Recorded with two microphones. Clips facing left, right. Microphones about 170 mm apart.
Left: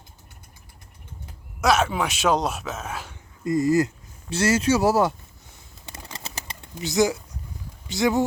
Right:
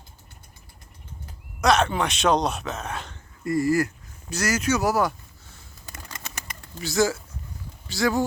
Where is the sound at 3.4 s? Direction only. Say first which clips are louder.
Left 2 dB; 20° left (ahead or behind).